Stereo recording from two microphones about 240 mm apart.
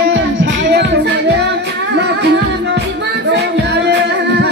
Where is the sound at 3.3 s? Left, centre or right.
Right.